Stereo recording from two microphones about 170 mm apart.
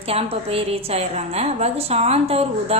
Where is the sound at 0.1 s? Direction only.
35° right (ahead or behind).